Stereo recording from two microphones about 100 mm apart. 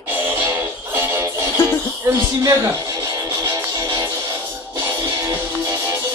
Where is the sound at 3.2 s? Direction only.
30° right (ahead or behind).